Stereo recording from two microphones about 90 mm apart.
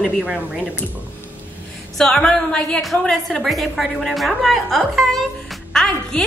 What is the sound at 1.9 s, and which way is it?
A woman's voice, 5° left (ahead or behind).